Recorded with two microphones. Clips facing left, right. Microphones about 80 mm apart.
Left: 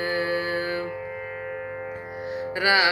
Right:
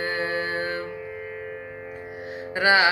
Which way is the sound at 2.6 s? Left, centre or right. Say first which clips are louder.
Right 2 dB; right.